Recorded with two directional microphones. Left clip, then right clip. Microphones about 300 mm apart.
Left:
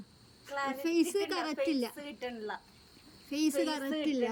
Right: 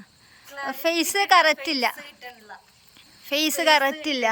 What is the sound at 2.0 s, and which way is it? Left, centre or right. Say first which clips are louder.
Speech: left 2 dB; left.